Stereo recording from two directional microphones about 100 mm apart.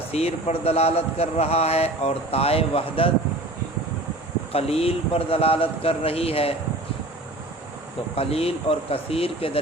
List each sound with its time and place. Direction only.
0.1 s a man's voice: 90° left; by 3.1 s 65° left (ahead or behind)
4.5 s speech: 85° left
8.1 s speech: 80° left